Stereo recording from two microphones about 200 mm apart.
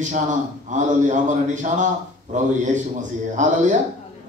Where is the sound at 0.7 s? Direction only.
35° right (ahead or behind).